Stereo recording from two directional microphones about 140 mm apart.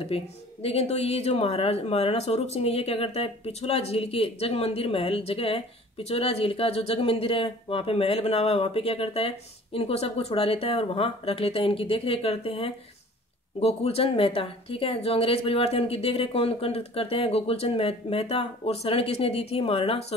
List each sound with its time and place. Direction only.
0.0 s speech: 45° left (ahead or behind)